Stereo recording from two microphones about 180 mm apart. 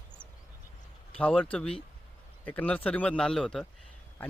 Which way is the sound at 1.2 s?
5° left (ahead or behind).